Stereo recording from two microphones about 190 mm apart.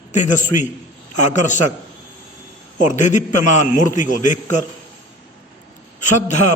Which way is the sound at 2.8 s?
40° left (ahead or behind).